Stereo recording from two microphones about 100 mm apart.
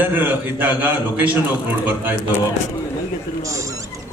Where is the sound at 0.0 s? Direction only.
20° right (ahead or behind).